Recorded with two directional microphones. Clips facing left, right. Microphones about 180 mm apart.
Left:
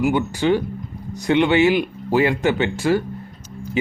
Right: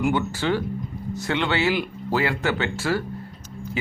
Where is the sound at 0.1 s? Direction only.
15° left (ahead or behind).